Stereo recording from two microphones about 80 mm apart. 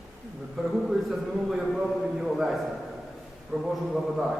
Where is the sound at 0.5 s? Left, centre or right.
Centre.